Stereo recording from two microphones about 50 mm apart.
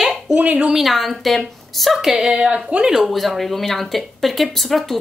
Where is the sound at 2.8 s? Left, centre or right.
Centre.